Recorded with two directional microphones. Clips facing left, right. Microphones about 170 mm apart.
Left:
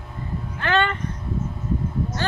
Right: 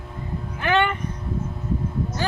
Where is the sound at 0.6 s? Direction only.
15° right (ahead or behind).